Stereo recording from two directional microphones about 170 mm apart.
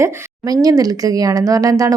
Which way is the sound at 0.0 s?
20° right (ahead or behind).